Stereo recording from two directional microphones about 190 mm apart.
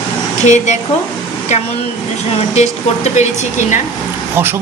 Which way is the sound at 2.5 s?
35° left (ahead or behind).